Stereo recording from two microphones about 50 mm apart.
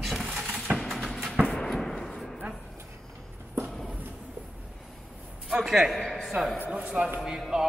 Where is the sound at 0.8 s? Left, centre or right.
Centre.